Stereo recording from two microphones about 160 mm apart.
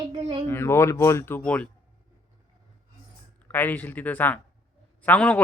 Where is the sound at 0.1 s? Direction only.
40° right (ahead or behind).